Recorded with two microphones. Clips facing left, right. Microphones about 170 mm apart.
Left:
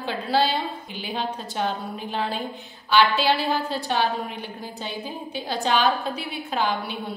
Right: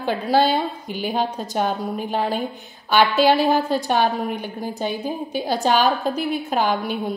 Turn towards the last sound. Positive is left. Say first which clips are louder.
# right 5 dB
turn(degrees=-45)  # may be behind; listen again after turning